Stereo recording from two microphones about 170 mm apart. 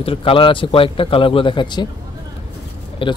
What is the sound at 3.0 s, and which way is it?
Speech, 30° left (ahead or behind).